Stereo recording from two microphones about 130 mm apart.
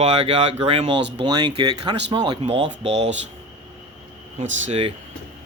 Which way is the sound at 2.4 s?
45° right (ahead or behind).